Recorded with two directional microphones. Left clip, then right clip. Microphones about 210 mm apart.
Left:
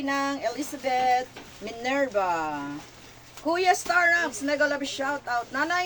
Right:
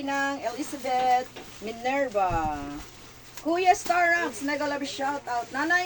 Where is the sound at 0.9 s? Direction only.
45° left (ahead or behind).